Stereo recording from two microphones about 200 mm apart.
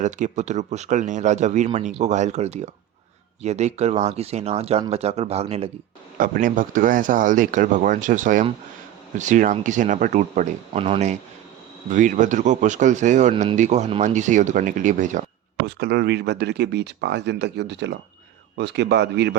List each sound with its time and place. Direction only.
0.0 s speech: 35° right (ahead or behind)
6.1 s speech: 45° right (ahead or behind)
15.6 s speech: 55° right (ahead or behind)